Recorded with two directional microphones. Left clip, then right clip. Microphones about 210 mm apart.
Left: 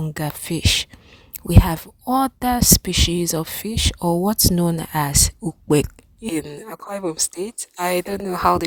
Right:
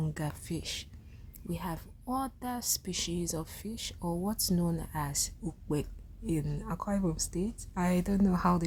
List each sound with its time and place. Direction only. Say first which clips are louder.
0.0 s a woman's voice: left 11 dB; 40° left (ahead or behind)